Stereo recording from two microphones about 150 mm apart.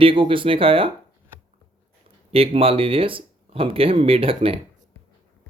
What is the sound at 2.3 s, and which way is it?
Speech, 40° right (ahead or behind).